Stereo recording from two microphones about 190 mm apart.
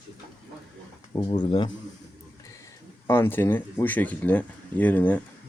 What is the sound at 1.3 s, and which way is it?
Speech, 25° left (ahead or behind).